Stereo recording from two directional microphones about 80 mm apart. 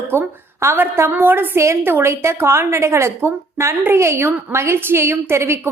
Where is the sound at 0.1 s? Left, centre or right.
Right.